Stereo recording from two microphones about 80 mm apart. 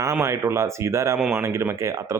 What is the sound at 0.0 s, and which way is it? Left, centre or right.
Speech, right.